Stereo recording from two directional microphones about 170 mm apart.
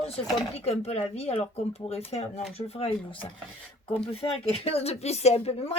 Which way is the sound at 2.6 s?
35° left (ahead or behind).